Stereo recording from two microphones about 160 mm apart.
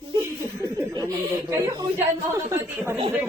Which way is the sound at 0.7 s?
25° right (ahead or behind).